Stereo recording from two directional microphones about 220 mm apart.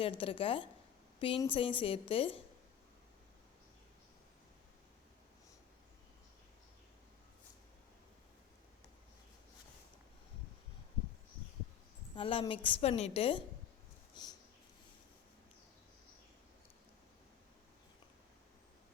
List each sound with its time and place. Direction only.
0.0 s a woman's voice: 25° left (ahead or behind)
12.1 s a woman's voice: 25° left (ahead or behind)
14.2 s a sound: 20° left (ahead or behind)